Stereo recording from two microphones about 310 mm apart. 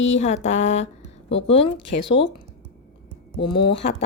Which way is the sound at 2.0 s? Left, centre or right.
Left.